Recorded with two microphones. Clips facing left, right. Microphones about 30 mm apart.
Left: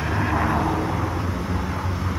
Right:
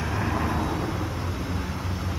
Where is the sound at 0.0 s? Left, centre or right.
Centre.